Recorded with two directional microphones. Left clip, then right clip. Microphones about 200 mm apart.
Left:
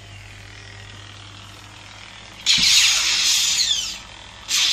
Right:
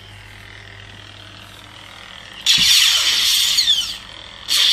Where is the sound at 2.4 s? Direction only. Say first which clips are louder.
Right 3 dB; 25° right (ahead or behind).